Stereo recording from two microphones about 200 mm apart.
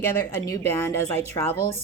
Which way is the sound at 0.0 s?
15° left (ahead or behind).